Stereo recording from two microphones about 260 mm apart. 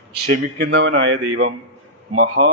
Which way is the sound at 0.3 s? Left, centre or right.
Right.